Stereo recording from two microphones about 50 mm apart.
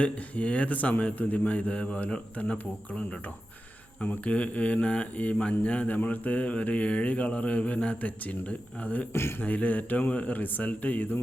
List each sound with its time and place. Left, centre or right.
0.0 s a man's voice: left